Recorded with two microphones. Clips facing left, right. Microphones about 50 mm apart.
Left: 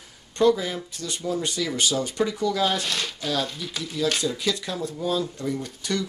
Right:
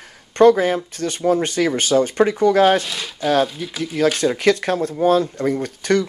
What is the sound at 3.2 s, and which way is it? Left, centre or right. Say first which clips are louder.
Speech: right 12 dB; right.